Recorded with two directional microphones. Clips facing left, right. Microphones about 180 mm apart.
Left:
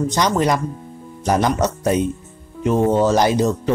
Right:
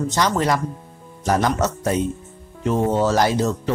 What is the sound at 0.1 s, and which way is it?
Speech, 15° left (ahead or behind).